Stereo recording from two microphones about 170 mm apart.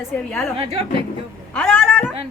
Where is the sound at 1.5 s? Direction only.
5° left (ahead or behind).